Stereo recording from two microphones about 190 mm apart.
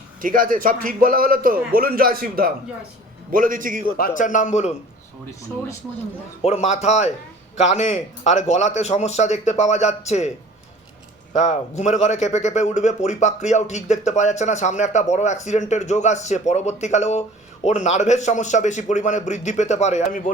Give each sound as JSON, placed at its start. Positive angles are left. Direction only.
{"t": 0.2, "sound": "a man's voice", "side_deg": -45}
{"t": 3.9, "sound": "speech", "side_deg": 45}
{"t": 6.4, "sound": "speech", "side_deg": 35}
{"t": 11.3, "sound": "speech", "side_deg": 40}